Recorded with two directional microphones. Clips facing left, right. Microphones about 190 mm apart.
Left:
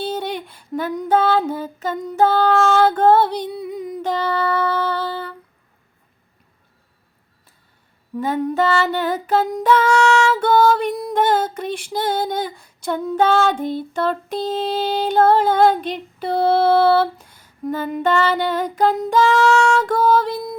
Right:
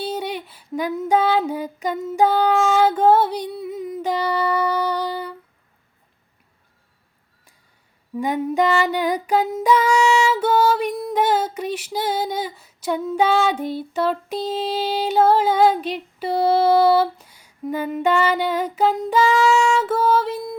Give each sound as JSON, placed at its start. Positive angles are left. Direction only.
{"t": 0.0, "sound": "female singing", "side_deg": -10}
{"t": 8.1, "sound": "female singing", "side_deg": -10}